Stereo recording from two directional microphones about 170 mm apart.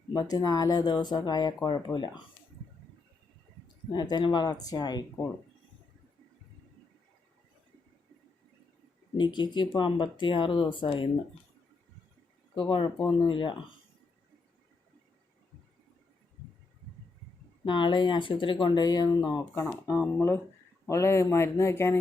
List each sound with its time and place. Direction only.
0.1 s speech: 25° left (ahead or behind)
3.9 s speech: 25° left (ahead or behind)
9.1 s speech: 25° left (ahead or behind)
12.5 s speech: 30° left (ahead or behind)
17.7 s speech: 30° left (ahead or behind)